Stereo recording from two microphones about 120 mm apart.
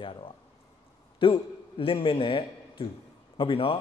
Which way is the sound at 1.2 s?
45° left (ahead or behind).